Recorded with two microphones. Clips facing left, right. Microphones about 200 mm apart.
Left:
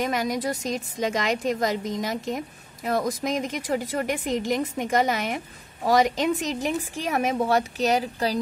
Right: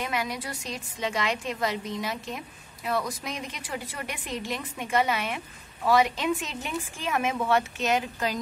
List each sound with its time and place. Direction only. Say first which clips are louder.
0.0 s a woman's voice: left 6 dB; 40° left (ahead or behind)